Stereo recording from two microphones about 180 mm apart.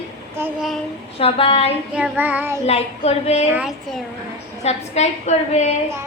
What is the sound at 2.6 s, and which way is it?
Speech, 35° left (ahead or behind).